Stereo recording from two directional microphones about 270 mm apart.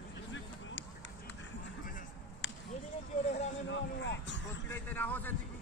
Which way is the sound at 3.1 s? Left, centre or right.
Left.